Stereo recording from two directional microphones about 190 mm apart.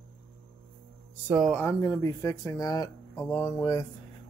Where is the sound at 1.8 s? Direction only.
15° left (ahead or behind).